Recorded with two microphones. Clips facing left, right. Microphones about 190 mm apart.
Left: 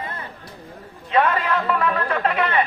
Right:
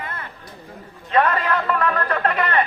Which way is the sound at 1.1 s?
5° left (ahead or behind).